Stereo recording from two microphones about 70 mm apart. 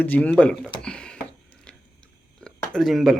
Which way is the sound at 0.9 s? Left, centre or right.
Centre.